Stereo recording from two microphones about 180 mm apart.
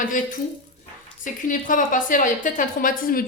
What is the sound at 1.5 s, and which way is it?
A woman's voice, 50° left (ahead or behind).